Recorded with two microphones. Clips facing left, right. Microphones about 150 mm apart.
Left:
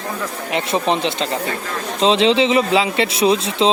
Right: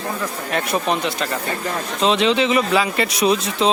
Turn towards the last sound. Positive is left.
turn(degrees=25)  # may be behind; listen again after turning